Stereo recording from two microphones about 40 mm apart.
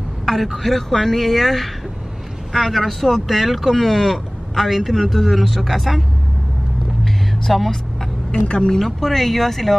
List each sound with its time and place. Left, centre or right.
0.2 s speech: centre
7.1 s vehicle: centre
8.5 s speech: centre
8.8 s speech: centre